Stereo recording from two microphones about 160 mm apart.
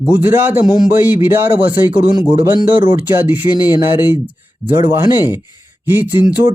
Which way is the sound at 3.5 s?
25° left (ahead or behind).